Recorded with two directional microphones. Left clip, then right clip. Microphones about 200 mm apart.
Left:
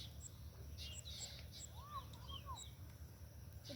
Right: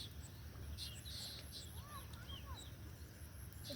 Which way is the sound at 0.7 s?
20° right (ahead or behind).